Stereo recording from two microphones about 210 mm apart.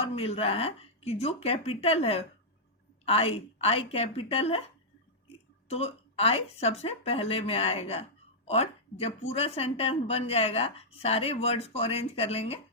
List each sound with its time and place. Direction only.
0.0 s speech: 25° left (ahead or behind)